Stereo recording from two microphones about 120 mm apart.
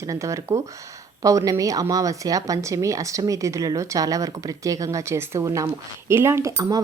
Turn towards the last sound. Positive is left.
turn(degrees=-30)  # may be behind; listen again after turning